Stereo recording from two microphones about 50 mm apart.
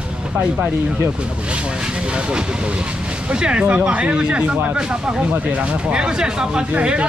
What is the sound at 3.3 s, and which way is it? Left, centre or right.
Speech, centre.